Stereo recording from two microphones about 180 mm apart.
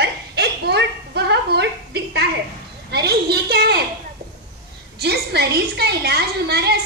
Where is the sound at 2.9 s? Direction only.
65° right (ahead or behind).